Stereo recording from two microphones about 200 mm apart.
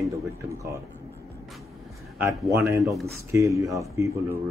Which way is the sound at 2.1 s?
10° right (ahead or behind).